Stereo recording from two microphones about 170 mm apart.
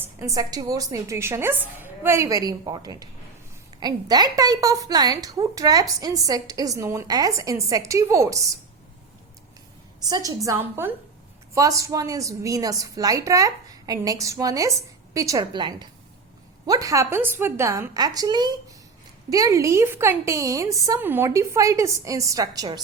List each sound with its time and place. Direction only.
0.0 s a woman's voice: 15° right (ahead or behind)
10.1 s a woman's voice: 20° right (ahead or behind)